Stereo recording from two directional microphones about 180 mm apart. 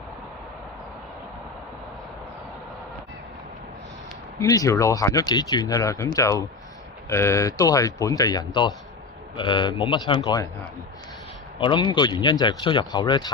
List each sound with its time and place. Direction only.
4.4 s speech: 20° left (ahead or behind)
11.6 s speech: 25° left (ahead or behind)